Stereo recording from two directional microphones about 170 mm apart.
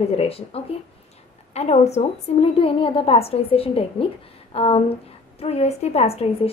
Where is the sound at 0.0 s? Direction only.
35° left (ahead or behind).